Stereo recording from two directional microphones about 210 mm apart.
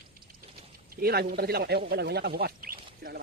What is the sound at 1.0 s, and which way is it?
Speech, 45° right (ahead or behind).